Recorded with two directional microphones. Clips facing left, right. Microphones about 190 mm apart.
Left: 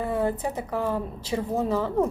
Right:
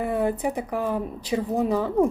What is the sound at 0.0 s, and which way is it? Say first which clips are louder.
Speech: right 2 dB; 15° right (ahead or behind).